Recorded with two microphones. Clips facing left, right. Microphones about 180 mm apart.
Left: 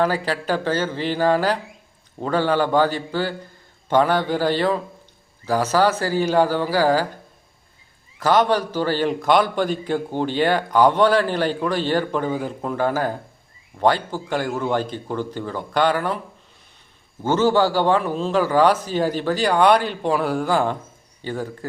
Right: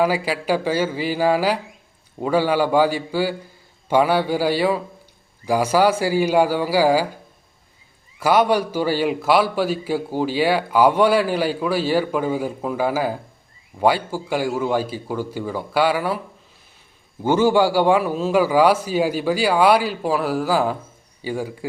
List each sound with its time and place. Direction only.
0.0 s a man's voice: 10° right (ahead or behind)
8.2 s a man's voice: 10° right (ahead or behind)
17.2 s a man's voice: 10° right (ahead or behind)